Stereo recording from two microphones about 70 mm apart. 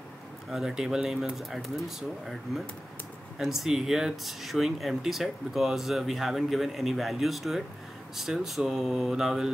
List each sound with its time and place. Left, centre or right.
0.5 s speech: centre